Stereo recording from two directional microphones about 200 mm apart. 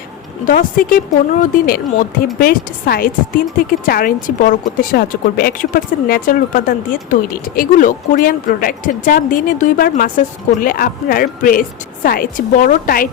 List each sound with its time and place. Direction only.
0.4 s a woman's voice: 45° left (ahead or behind)